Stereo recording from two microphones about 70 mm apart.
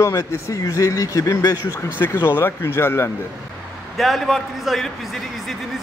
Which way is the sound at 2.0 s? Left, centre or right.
Left.